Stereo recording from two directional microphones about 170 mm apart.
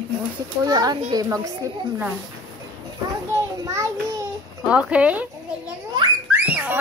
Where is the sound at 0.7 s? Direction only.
20° right (ahead or behind).